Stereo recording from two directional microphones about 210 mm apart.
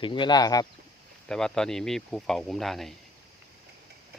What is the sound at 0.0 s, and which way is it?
Speech, 20° left (ahead or behind).